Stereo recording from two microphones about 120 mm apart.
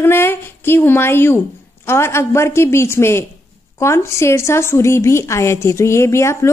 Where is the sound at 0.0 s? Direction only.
20° left (ahead or behind).